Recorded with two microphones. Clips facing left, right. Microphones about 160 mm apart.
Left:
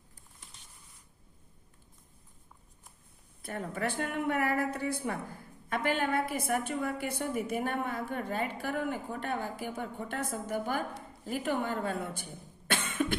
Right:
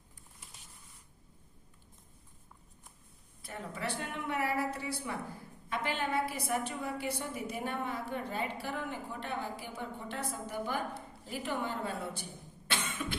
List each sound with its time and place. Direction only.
3.4 s a woman's voice: 50° left (ahead or behind)
12.6 s cough: 50° left (ahead or behind)